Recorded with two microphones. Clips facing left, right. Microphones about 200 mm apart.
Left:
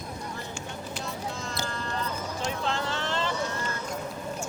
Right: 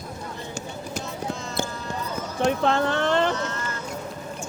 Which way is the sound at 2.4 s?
60° right (ahead or behind).